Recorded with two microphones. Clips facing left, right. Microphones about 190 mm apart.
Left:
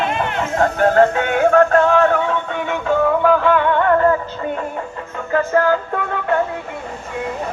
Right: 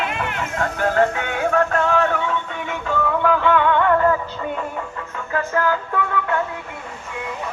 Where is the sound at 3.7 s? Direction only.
35° left (ahead or behind).